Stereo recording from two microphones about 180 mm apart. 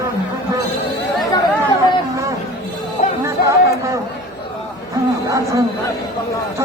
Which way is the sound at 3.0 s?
40° left (ahead or behind).